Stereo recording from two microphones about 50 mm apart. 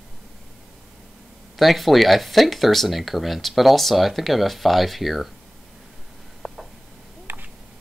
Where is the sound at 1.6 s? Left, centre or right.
Centre.